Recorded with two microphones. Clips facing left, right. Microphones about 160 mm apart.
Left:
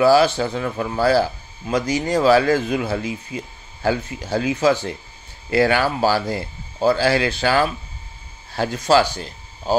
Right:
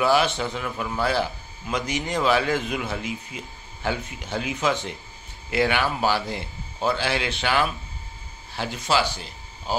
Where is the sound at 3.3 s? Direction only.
35° left (ahead or behind).